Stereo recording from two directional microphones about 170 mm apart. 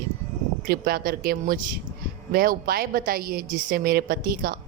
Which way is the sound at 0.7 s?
60° right (ahead or behind).